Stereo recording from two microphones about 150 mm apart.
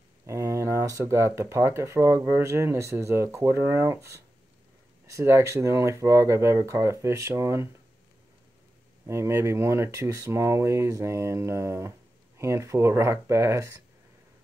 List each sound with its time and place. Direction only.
0.3 s speech: 20° right (ahead or behind)
9.0 s speech: 20° right (ahead or behind)